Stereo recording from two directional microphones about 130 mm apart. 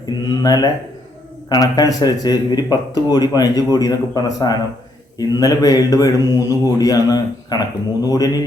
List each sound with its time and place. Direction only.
0.0 s speech: 30° left (ahead or behind)